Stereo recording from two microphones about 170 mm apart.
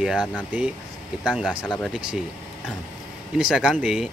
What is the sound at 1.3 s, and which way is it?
Speech, 5° right (ahead or behind).